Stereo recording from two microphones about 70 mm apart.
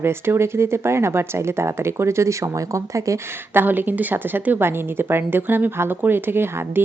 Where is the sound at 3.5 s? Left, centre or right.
Right.